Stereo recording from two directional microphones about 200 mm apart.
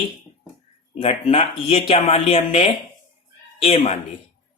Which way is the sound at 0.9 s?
30° left (ahead or behind).